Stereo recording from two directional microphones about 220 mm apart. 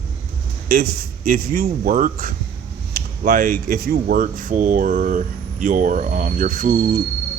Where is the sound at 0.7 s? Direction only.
45° right (ahead or behind).